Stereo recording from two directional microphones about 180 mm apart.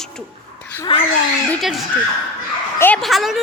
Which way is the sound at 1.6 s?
Centre (ahead or behind).